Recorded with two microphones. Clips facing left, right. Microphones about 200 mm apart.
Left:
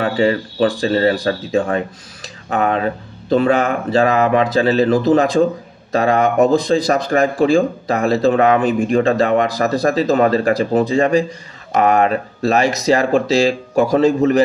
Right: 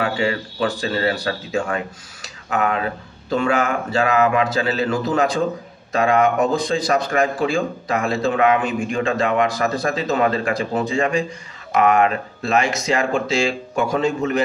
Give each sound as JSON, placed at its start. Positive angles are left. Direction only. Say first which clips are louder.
{"t": 0.0, "sound": "speech", "louder": "left 5 dB", "side_deg": 35}